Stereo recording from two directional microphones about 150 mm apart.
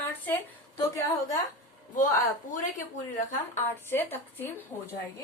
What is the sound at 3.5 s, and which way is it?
Speech, 15° left (ahead or behind).